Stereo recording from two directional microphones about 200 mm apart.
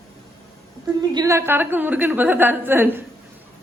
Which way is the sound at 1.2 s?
15° right (ahead or behind).